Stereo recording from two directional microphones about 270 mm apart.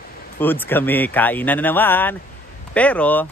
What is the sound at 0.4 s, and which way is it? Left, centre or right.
Speech, centre.